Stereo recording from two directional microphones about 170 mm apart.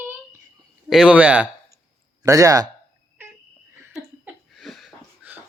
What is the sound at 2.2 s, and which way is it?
Speech, 20° right (ahead or behind).